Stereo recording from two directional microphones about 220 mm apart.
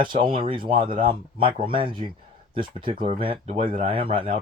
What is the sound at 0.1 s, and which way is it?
Speech, 25° right (ahead or behind).